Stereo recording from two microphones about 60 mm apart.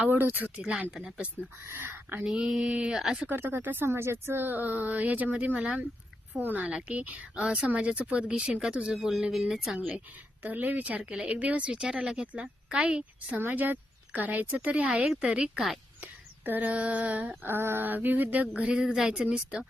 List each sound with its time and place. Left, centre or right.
0.1 s speech: right
0.4 s a woman's voice: centre
1.6 s speech: right
2.2 s a woman's voice: centre
3.2 s a woman's voice: right; by 9.7 s centre
10.4 s speech: right
11.7 s a woman's voice: centre
13.4 s a woman's voice: right; by 15.6 s centre
16.5 s speech: right
17.4 s speech: right
18.7 s a woman's voice: centre